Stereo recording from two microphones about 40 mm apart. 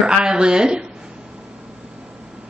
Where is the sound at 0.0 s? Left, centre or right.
Right.